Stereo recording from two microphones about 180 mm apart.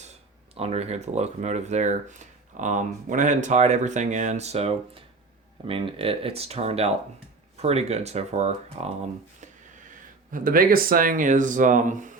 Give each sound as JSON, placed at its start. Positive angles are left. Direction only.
{"t": 0.5, "sound": "speech", "side_deg": -35}
{"t": 10.3, "sound": "speech", "side_deg": -50}